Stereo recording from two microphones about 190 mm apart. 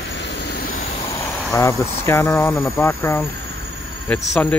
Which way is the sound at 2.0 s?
15° left (ahead or behind).